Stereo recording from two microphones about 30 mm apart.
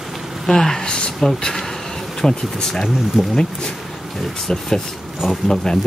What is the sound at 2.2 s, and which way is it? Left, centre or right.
Speech, centre.